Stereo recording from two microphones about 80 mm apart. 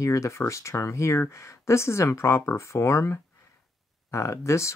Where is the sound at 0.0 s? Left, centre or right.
Left.